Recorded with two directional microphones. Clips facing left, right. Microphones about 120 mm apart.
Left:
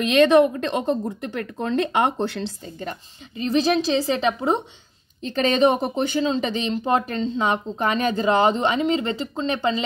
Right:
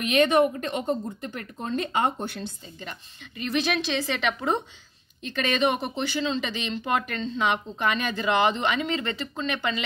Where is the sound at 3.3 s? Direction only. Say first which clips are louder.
Left 6 dB; 30° left (ahead or behind).